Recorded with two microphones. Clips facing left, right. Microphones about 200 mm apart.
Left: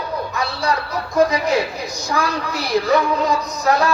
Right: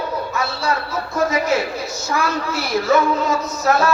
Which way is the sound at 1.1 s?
15° left (ahead or behind).